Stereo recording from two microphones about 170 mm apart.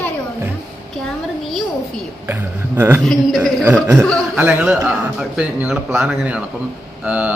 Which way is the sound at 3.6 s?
10° right (ahead or behind).